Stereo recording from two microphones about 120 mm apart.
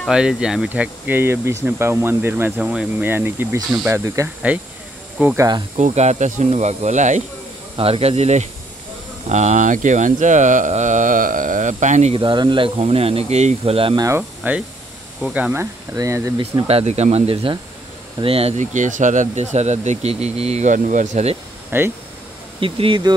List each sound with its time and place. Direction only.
0.1 s speech: 5° right (ahead or behind)
1.0 s speech: 20° right (ahead or behind)
5.8 s speech: 80° right
7.7 s speech: 55° right (ahead or behind)
9.3 s speech: 80° right
12.1 s speech: 45° right (ahead or behind)
13.9 s speech: 25° right (ahead or behind)
14.4 s speech: 15° right (ahead or behind)
15.5 s speech: 25° right (ahead or behind)
16.6 s speech: 60° right (ahead or behind)
18.6 s speech: 90° right
21.6 s speech: 20° right (ahead or behind)
22.6 s speech: 45° right (ahead or behind)